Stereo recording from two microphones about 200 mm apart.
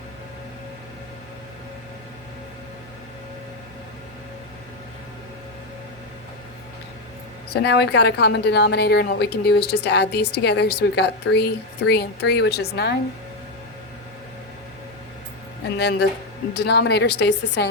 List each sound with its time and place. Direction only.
7.5 s a woman's voice: 55° left (ahead or behind)
15.8 s a woman's voice: 55° left (ahead or behind)